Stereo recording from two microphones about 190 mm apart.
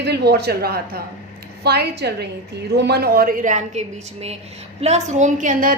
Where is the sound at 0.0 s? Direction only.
60° right (ahead or behind).